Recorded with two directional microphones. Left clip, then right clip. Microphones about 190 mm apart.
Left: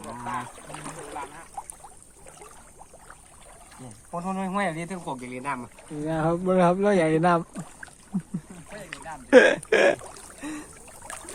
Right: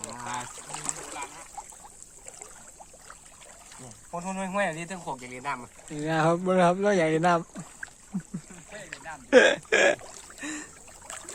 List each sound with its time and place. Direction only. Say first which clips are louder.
0.3 s a sound: left 3 dB; 45° right (ahead or behind)
3.8 s speech: left 2 dB; 35° right (ahead or behind)
6.1 s speech: right 2 dB; 35° right (ahead or behind)
6.4 s speech: left 1 dB; 15° right (ahead or behind)
8.9 s rowboat: left 3 dB; 5° left (ahead or behind)
9.3 s speech: left 3 dB; centre (ahead or behind)
10.4 s a sound: even; 10° right (ahead or behind)